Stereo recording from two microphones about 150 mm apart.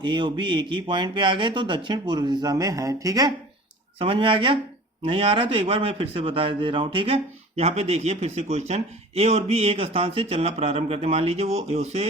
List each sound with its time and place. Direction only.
0.0 s a man's voice: 30° right (ahead or behind)
3.9 s a man's voice: 35° right (ahead or behind)